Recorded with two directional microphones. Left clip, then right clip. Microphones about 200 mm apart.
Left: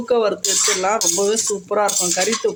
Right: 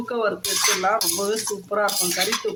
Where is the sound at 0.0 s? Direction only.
30° left (ahead or behind).